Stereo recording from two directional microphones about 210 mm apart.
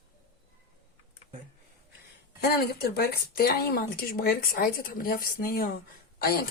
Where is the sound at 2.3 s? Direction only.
50° left (ahead or behind).